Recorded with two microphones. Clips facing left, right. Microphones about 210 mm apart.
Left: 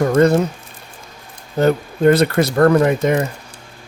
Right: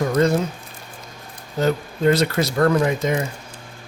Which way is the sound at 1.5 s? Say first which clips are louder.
Left 5 dB; 55° left (ahead or behind).